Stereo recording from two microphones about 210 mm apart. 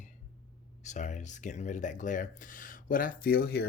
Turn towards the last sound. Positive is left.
turn(degrees=50)  # may be behind; listen again after turning